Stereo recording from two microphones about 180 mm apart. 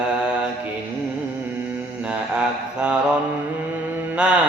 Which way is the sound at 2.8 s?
5° right (ahead or behind).